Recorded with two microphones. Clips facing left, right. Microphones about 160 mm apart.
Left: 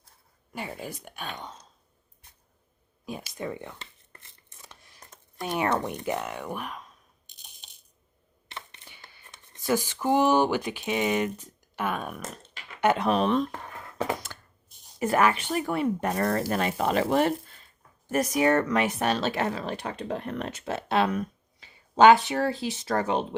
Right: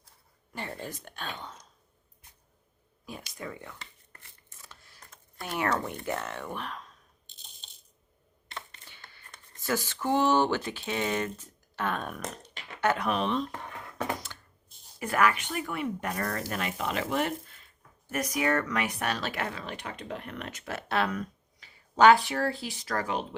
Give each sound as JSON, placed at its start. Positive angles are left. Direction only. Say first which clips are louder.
{"t": 0.5, "sound": "speech", "louder": "left 2 dB", "side_deg": 10}
{"t": 3.3, "sound": "a sound", "louder": "left 6 dB", "side_deg": 25}
{"t": 7.3, "sound": "coin", "louder": "left 1 dB", "side_deg": 15}
{"t": 8.8, "sound": "a sound", "louder": "left 1 dB", "side_deg": 15}
{"t": 9.6, "sound": "speech", "louder": "left 4 dB", "side_deg": 15}
{"t": 12.8, "sound": "speech", "louder": "left 4 dB", "side_deg": 20}
{"t": 13.1, "sound": "speech", "louder": "left 5 dB", "side_deg": 40}
{"t": 14.3, "sound": "tearing", "louder": "left 4 dB", "side_deg": 45}
{"t": 14.9, "sound": "speech", "louder": "left 3 dB", "side_deg": 25}